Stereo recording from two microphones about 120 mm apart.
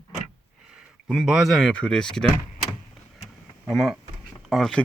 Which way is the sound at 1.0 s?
Centre (ahead or behind).